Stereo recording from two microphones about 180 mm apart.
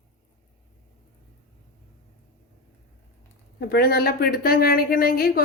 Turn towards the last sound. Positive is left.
turn(degrees=55)  # may be behind; listen again after turning